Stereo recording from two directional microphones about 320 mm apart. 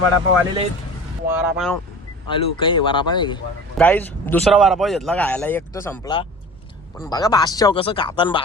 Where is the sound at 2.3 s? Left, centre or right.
Centre.